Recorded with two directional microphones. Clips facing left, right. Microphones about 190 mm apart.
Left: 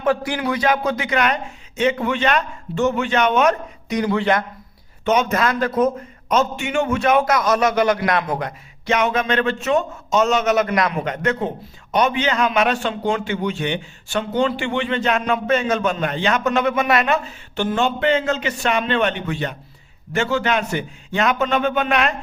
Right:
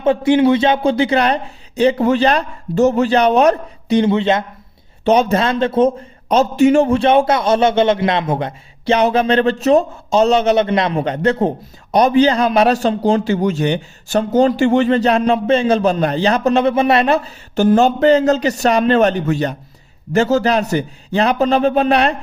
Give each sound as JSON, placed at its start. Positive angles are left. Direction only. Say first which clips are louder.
{"t": 0.0, "sound": "a man's voice", "louder": "right 8 dB", "side_deg": -25}
{"t": 5.0, "sound": "a man's voice", "louder": "right 5 dB", "side_deg": -35}